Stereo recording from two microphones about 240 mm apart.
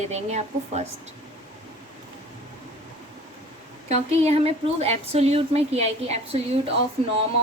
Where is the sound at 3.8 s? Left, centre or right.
Right.